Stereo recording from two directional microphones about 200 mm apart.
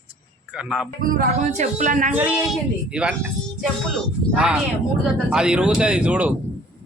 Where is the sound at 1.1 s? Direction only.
45° right (ahead or behind).